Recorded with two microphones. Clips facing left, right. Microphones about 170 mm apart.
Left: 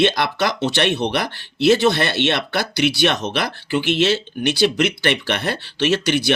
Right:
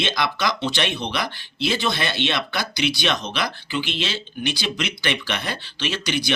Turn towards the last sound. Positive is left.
turn(degrees=55)  # may be behind; listen again after turning